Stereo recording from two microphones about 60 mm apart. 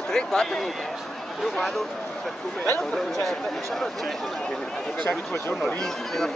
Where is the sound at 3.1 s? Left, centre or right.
Centre.